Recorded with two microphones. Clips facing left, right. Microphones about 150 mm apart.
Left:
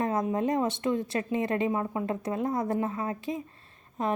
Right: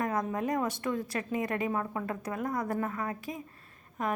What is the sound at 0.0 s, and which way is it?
A woman's voice, 25° left (ahead or behind).